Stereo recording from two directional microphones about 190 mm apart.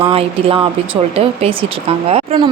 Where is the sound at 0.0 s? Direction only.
30° right (ahead or behind).